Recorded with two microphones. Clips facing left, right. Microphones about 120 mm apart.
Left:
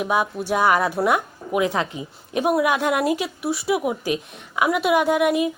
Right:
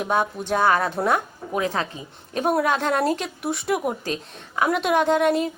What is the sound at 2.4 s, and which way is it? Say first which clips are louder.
Speech: left 2 dB; 5° left (ahead or behind).